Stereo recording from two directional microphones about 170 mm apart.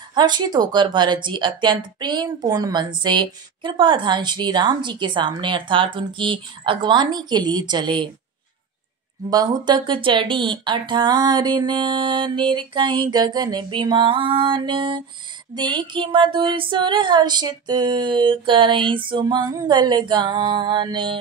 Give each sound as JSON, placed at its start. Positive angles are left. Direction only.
{"t": 0.1, "sound": "a woman's voice", "side_deg": -25}
{"t": 9.3, "sound": "a woman's voice", "side_deg": -25}